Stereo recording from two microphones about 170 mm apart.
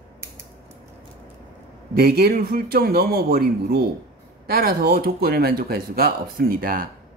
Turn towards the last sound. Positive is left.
turn(degrees=-55)  # may be behind; listen again after turning